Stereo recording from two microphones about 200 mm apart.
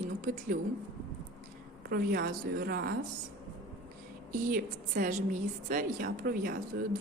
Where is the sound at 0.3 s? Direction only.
45° right (ahead or behind).